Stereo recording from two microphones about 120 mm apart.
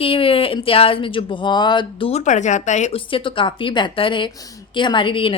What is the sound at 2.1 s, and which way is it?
Speech, 85° left.